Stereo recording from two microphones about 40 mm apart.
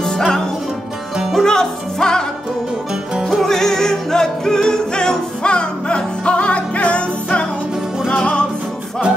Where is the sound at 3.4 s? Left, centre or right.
Centre; by 8.4 s left.